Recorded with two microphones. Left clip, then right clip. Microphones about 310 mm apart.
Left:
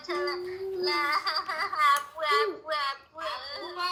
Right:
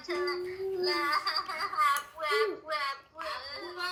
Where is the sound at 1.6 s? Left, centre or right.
Centre.